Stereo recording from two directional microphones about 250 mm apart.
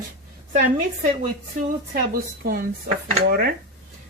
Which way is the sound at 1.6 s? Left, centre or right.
Right.